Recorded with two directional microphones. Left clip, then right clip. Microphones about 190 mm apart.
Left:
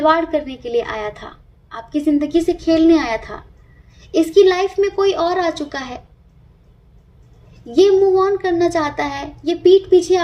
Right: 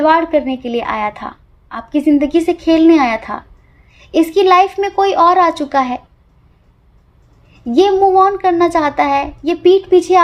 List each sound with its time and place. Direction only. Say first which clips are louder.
0.0 s a child's voice: right 4 dB; 30° right (ahead or behind)
7.8 s a child's voice: right 3 dB; 30° right (ahead or behind)